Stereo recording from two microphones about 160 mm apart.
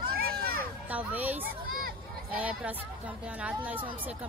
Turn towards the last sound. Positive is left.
turn(degrees=-10)  # may be behind; listen again after turning